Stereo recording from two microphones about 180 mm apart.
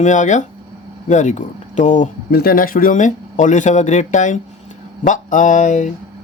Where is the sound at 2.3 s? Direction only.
60° left (ahead or behind).